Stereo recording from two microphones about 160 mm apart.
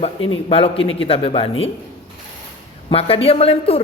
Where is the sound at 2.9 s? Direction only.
40° left (ahead or behind).